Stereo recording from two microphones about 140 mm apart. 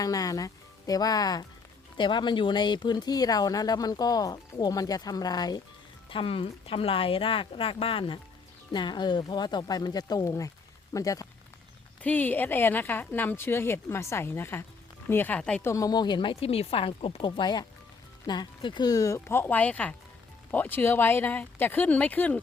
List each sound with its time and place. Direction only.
0.0 s speech: 25° left (ahead or behind)
6.1 s speech: 40° left (ahead or behind); by 11.3 s 25° left (ahead or behind)
12.0 s speech: 10° left (ahead or behind)
15.6 s speech: 25° left (ahead or behind)